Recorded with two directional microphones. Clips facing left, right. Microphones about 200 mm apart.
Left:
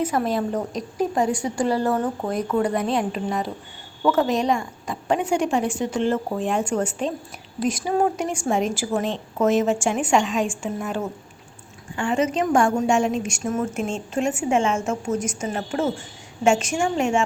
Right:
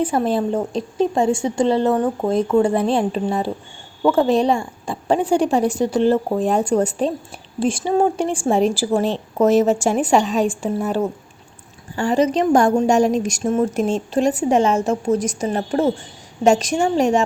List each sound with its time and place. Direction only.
0.0 s a woman's voice: 30° right (ahead or behind)